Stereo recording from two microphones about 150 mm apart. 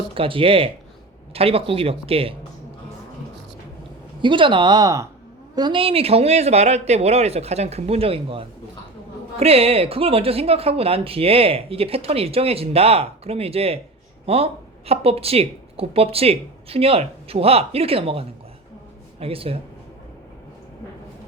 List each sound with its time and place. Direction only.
0.1 s speech: 35° right (ahead or behind)
4.2 s speech: 35° right (ahead or behind)